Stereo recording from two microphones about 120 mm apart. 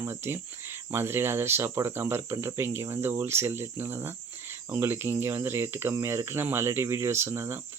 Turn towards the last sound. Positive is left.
turn(degrees=-20)  # may be behind; listen again after turning